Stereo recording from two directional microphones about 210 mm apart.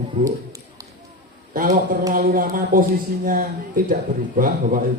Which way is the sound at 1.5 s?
40° right (ahead or behind).